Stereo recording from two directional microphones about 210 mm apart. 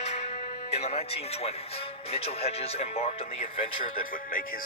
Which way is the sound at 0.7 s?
30° left (ahead or behind).